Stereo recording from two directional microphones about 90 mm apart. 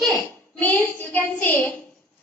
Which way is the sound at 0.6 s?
20° left (ahead or behind).